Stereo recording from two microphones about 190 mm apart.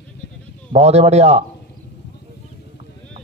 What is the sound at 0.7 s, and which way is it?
Speech, 35° right (ahead or behind).